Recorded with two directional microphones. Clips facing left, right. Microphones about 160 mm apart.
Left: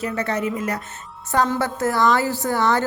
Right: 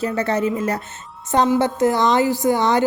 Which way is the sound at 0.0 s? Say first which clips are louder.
Right 4 dB; 30° right (ahead or behind).